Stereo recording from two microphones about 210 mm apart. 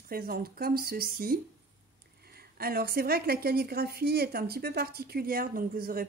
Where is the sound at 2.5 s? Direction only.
45° right (ahead or behind).